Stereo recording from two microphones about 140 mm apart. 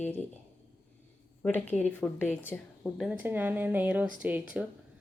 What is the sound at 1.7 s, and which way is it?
A woman's voice, 10° left (ahead or behind).